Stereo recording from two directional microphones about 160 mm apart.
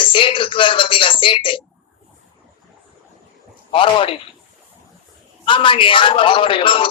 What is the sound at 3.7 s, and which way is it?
Music, 35° left (ahead or behind).